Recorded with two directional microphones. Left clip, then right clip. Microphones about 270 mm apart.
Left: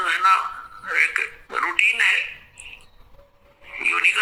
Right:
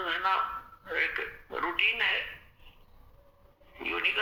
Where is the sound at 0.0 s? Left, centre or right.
Centre.